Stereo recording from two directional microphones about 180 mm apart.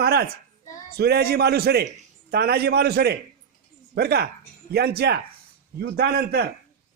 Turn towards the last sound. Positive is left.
turn(degrees=-60)  # may be behind; listen again after turning